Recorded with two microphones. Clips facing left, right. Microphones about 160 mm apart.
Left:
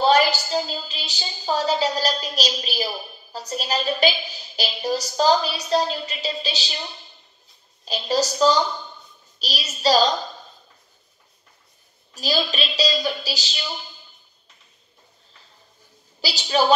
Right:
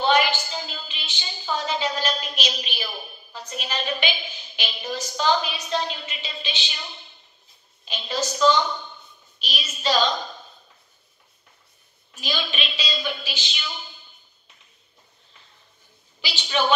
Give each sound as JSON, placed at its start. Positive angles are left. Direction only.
{"t": 0.0, "sound": "a woman's voice", "side_deg": 35}
{"t": 7.8, "sound": "a woman's voice", "side_deg": 35}
{"t": 12.1, "sound": "a woman's voice", "side_deg": 35}
{"t": 16.2, "sound": "a woman's voice", "side_deg": 35}